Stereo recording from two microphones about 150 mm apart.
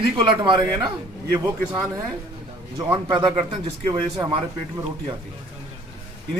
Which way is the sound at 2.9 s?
30° right (ahead or behind).